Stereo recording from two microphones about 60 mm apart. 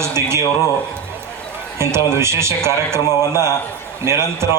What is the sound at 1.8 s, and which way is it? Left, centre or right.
A man's voice, right.